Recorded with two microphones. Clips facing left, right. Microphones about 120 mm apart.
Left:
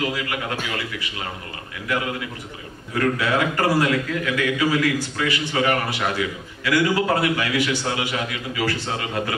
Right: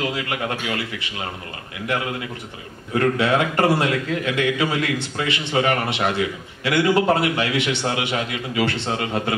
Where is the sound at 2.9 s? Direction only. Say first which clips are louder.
Right 3 dB; 25° right (ahead or behind).